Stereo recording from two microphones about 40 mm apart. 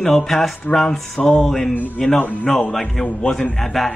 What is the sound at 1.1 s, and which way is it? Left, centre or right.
Speech, left.